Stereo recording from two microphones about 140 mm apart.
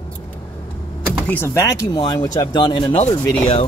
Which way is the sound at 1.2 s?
15° left (ahead or behind).